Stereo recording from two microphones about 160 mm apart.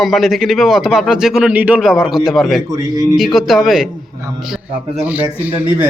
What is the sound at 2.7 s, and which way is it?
Speech, 25° right (ahead or behind).